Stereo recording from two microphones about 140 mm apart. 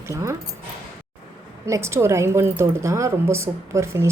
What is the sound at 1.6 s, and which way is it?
A woman's voice, 20° right (ahead or behind).